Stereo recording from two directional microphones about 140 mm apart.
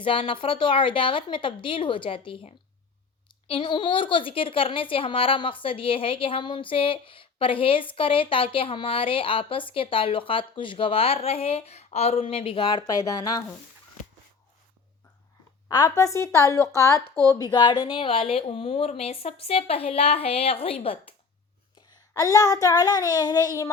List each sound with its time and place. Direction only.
0.0 s a woman's voice: 40° left (ahead or behind)
15.7 s speech: 25° left (ahead or behind); by 21.2 s 40° left (ahead or behind)
21.8 s speech: 25° left (ahead or behind)